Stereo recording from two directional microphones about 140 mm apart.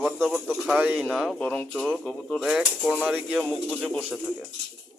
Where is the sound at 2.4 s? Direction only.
5° right (ahead or behind).